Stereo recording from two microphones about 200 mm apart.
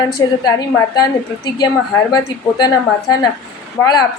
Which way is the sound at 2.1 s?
20° left (ahead or behind).